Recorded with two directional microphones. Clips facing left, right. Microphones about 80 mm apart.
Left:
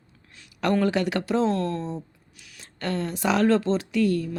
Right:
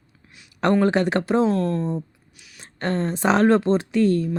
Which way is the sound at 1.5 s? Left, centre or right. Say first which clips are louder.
Right 4 dB; centre.